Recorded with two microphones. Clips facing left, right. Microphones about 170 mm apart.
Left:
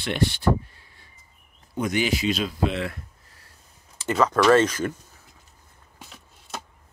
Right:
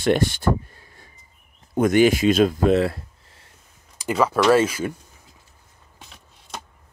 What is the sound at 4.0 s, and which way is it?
Speech, 10° right (ahead or behind).